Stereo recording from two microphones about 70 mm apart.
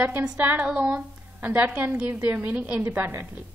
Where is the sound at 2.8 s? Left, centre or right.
Right.